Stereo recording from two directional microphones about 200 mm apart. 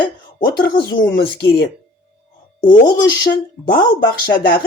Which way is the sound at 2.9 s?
45° left (ahead or behind).